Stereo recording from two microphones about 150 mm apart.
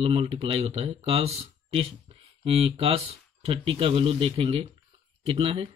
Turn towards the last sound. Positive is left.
turn(degrees=-40)  # may be behind; listen again after turning